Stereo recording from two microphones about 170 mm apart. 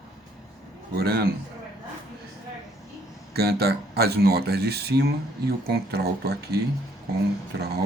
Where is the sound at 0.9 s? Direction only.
65° right (ahead or behind).